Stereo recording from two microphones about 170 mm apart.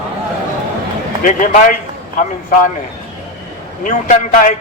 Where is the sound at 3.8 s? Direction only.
50° left (ahead or behind).